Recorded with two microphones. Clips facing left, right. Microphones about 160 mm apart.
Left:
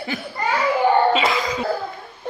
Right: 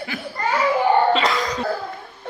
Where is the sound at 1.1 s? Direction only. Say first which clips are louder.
Even; 5° left (ahead or behind).